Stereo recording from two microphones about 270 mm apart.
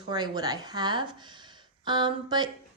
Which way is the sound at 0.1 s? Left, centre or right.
Centre.